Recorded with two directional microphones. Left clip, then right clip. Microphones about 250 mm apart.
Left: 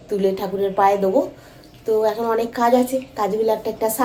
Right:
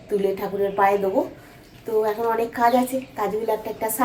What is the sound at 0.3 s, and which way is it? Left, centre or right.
Speech, centre.